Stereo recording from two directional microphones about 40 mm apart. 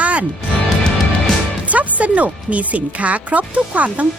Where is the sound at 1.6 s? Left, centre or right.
Right.